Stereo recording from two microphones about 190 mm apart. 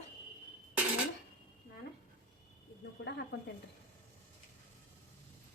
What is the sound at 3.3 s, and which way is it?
Speech, 60° left (ahead or behind).